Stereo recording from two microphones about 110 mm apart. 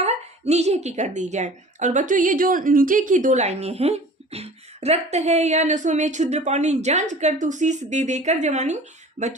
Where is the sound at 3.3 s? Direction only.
85° right.